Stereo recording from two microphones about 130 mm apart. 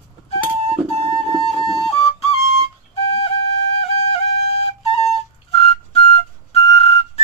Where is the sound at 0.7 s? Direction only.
45° right (ahead or behind).